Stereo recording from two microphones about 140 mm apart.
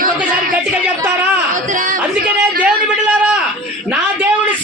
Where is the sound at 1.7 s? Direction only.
70° right (ahead or behind).